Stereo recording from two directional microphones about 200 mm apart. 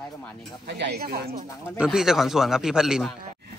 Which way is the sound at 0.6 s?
55° right (ahead or behind).